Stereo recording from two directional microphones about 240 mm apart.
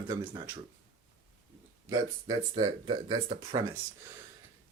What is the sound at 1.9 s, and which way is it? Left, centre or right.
Speech, centre.